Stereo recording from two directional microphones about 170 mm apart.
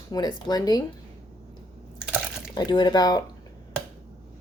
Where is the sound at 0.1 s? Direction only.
25° left (ahead or behind).